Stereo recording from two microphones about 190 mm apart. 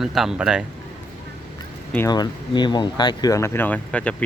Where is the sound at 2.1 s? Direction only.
25° left (ahead or behind); by 4.1 s 5° left (ahead or behind).